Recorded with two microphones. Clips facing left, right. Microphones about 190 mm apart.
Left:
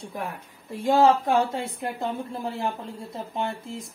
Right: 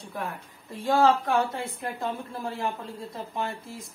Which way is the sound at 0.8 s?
20° left (ahead or behind).